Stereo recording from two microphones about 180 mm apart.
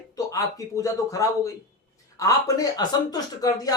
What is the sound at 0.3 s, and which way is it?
Speech, 20° left (ahead or behind).